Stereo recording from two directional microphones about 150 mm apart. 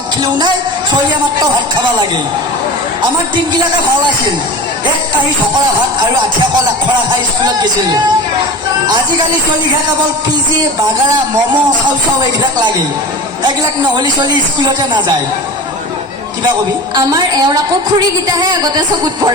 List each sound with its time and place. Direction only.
0.2 s speech: 30° right (ahead or behind)
13.6 s speech: 30° right (ahead or behind)
16.9 s speech: 25° right (ahead or behind)